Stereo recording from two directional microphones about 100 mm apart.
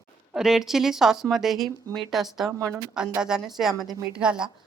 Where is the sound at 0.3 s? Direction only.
5° right (ahead or behind).